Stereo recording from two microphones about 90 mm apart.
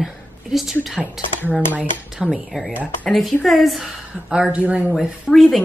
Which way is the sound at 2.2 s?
Centre (ahead or behind).